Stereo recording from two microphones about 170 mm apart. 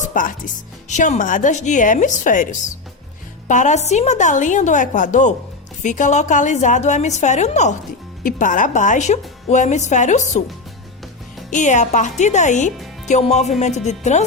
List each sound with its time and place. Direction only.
0.0 s a woman's voice: 50° left (ahead or behind)
11.5 s a woman's voice: 45° left (ahead or behind)